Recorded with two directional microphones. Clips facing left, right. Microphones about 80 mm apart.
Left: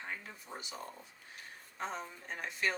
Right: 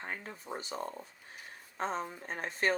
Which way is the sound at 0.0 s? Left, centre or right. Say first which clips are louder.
Right 3 dB; right.